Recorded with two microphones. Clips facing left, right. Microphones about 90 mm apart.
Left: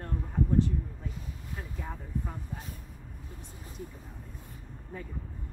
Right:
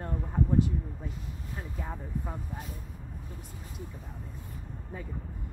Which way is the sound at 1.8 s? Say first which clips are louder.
Even; 10° right (ahead or behind).